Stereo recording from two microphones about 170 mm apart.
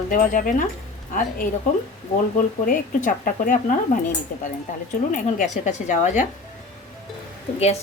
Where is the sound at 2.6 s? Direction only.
50° left (ahead or behind).